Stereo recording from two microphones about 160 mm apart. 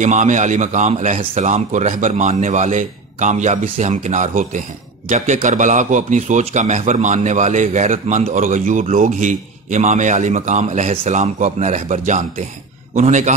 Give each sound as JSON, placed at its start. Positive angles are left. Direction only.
{"t": 0.0, "sound": "a man's voice", "side_deg": -50}